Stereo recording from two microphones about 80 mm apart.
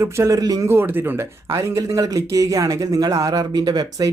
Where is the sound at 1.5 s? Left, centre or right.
Right.